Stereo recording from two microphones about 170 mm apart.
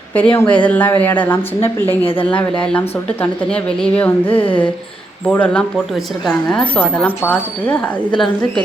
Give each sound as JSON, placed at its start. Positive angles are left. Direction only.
{"t": 0.1, "sound": "speech", "side_deg": 10}
{"t": 4.3, "sound": "speech", "side_deg": 30}
{"t": 5.3, "sound": "speech", "side_deg": 10}